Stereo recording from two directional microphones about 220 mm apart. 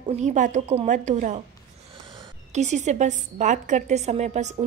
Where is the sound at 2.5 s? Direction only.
30° right (ahead or behind).